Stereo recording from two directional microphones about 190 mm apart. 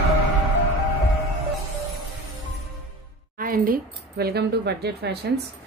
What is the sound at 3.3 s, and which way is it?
A woman's voice, 45° right (ahead or behind).